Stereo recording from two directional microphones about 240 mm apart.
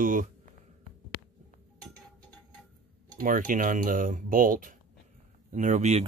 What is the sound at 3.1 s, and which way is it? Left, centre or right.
Speech, right.